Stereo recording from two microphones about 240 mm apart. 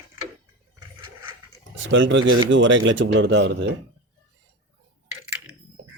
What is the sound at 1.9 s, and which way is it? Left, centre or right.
Speech, right.